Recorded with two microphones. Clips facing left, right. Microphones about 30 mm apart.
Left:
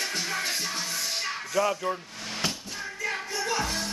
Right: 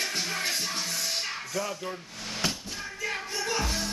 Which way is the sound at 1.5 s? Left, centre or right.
Left.